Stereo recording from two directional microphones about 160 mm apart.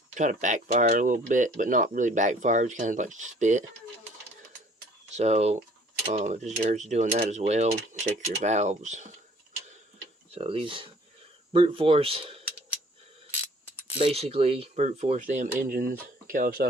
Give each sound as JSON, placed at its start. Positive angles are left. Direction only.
{"t": 0.1, "sound": "speech", "side_deg": -50}
{"t": 5.1, "sound": "speech", "side_deg": -45}
{"t": 10.3, "sound": "speech", "side_deg": -35}
{"t": 14.0, "sound": "speech", "side_deg": -40}